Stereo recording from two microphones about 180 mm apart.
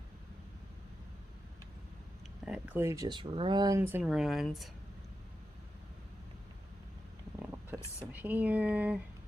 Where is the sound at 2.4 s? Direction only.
5° right (ahead or behind).